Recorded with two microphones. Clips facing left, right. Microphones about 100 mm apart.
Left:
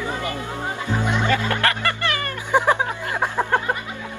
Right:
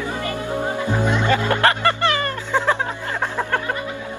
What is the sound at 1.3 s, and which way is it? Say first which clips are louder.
Music: right 3 dB; 30° right (ahead or behind).